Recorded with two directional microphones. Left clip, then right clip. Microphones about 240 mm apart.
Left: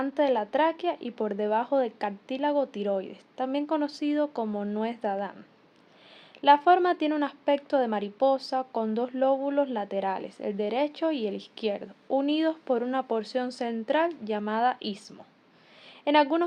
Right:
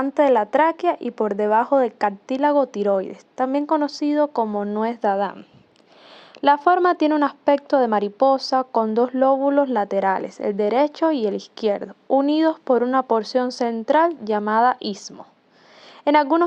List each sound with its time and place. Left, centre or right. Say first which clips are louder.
0.0 s a woman's voice: right 8 dB; right
6.4 s a woman's voice: right 4 dB; right
16.0 s a woman's voice: right 6 dB; right